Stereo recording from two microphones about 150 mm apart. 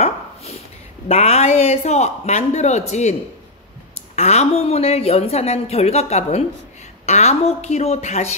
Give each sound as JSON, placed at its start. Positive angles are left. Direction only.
{"t": 1.0, "sound": "a woman's voice", "side_deg": 45}